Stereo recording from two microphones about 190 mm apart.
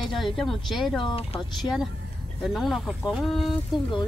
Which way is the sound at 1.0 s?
30° left (ahead or behind).